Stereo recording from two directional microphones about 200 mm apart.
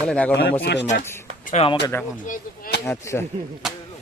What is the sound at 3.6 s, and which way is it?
Speech, 5° right (ahead or behind).